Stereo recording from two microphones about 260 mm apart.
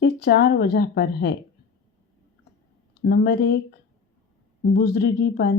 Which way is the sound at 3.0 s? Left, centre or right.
Left.